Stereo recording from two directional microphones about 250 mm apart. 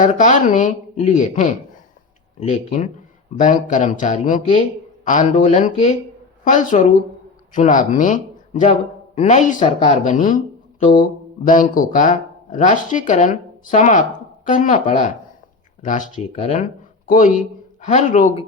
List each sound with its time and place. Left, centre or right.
0.0 s speech: left